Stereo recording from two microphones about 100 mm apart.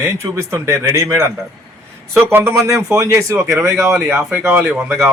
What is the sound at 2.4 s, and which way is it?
Speech, 30° right (ahead or behind).